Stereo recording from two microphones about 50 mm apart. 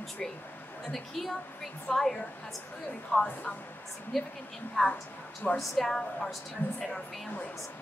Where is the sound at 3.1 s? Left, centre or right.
Left.